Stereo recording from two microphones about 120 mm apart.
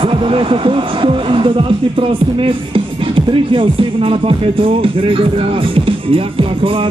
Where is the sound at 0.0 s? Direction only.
50° right (ahead or behind).